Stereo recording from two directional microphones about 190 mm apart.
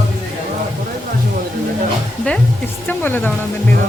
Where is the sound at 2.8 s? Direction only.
10° left (ahead or behind).